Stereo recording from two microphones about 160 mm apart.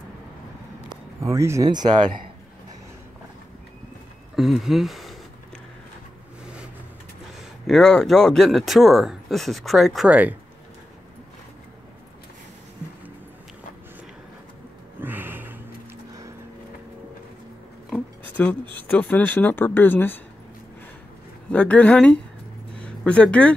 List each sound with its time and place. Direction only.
1.2 s speech: 20° right (ahead or behind)
4.4 s speech: centre (ahead or behind)
7.6 s speech: 5° left (ahead or behind)
15.0 s a sound: 10° right (ahead or behind)
17.8 s a sound: 10° left (ahead or behind)
18.8 s speech: 10° left (ahead or behind)
21.5 s speech: 10° left (ahead or behind)